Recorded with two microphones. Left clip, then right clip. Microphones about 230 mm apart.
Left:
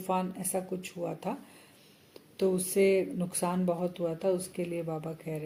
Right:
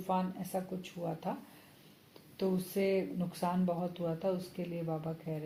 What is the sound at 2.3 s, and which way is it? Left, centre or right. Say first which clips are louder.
Speech: left 7 dB; left.